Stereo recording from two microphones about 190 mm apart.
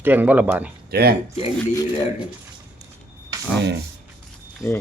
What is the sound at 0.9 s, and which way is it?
Speech, 55° right (ahead or behind).